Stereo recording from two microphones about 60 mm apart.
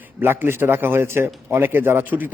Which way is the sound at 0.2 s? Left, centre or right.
Right.